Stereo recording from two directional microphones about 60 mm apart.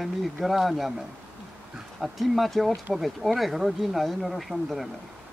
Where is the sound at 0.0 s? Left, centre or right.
Centre.